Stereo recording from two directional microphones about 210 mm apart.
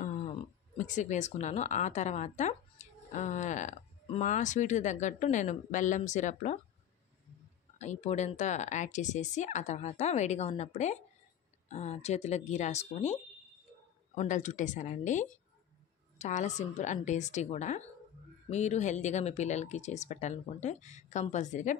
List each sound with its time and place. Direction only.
0.0 s speech: 35° left (ahead or behind)
7.8 s speech: 35° left (ahead or behind)